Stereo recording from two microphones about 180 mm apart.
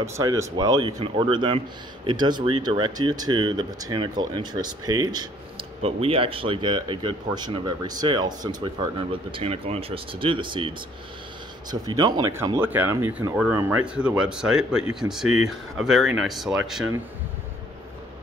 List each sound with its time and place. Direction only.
0.0 s speech: 15° right (ahead or behind)
11.7 s speech: 20° right (ahead or behind); by 16.8 s 5° right (ahead or behind)